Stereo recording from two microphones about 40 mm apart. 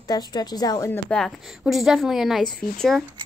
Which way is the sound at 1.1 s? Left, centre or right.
Left.